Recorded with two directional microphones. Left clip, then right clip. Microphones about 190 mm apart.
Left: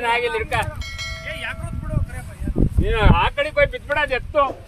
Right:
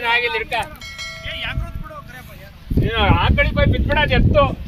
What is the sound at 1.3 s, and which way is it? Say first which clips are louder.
Music: right 4 dB; 60° left (ahead or behind).